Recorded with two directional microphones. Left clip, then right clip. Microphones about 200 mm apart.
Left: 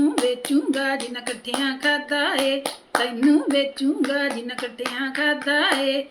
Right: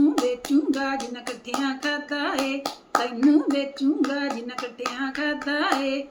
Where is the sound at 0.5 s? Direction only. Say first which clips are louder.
Left 2 dB; 10° left (ahead or behind).